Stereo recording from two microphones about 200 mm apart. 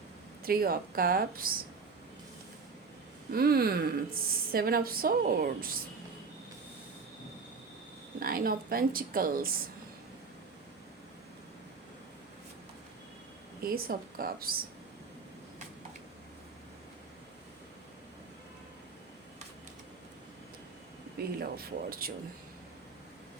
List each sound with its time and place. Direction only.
0.4 s speech: 50° right (ahead or behind)
3.3 s speech: 50° right (ahead or behind)
8.2 s speech: 50° right (ahead or behind)
13.6 s speech: 50° right (ahead or behind)
21.3 s speech: 50° right (ahead or behind)